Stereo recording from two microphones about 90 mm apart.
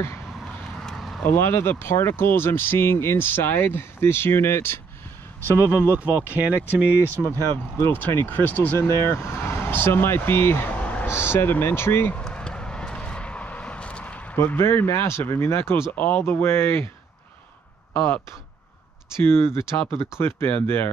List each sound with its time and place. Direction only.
0.7 s a sound: 5° left (ahead or behind)
1.2 s speech: 25° left (ahead or behind)
5.8 s speech: 15° right (ahead or behind)
7.2 s speech: 20° left (ahead or behind)
11.1 s speech: 25° left (ahead or behind)
12.2 s vehicle: 10° left (ahead or behind); by 15.8 s 30° left (ahead or behind)
16.0 s speech: 15° left (ahead or behind)
16.3 s speech: 30° left (ahead or behind)
19.2 s speech: 30° left (ahead or behind)